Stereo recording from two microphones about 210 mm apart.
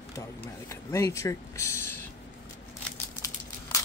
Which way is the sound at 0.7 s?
15° left (ahead or behind).